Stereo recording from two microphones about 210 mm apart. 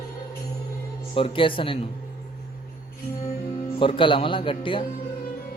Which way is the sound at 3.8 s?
25° left (ahead or behind).